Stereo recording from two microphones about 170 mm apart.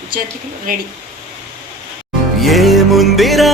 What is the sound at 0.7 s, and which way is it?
Speech, 55° right (ahead or behind).